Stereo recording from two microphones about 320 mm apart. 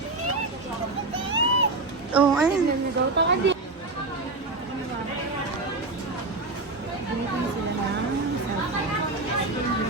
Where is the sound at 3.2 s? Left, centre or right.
Right.